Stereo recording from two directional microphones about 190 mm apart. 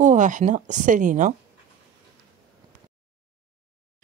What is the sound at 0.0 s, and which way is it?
Speech, 40° right (ahead or behind).